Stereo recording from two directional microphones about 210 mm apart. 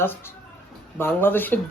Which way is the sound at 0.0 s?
10° left (ahead or behind).